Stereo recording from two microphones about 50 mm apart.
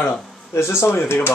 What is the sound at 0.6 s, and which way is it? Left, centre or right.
Speech, left.